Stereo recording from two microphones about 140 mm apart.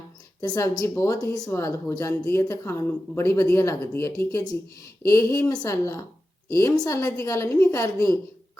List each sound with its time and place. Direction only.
0.4 s speech: 25° left (ahead or behind)